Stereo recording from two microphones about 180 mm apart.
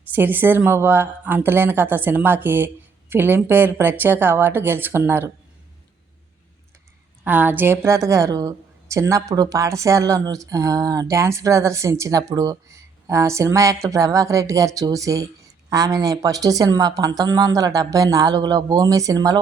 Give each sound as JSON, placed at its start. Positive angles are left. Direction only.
{"t": 0.1, "sound": "a woman's voice", "side_deg": -10}
{"t": 7.3, "sound": "a woman's voice", "side_deg": -10}